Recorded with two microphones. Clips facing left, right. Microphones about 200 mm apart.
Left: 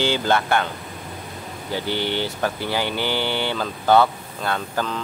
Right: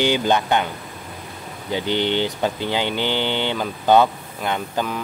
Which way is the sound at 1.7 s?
20° right (ahead or behind).